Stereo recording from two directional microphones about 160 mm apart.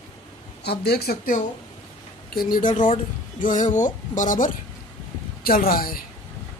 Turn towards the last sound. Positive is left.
turn(degrees=65)  # may be behind; listen again after turning